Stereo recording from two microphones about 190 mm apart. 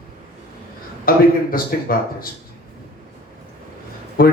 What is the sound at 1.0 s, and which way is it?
Speech, 50° left (ahead or behind).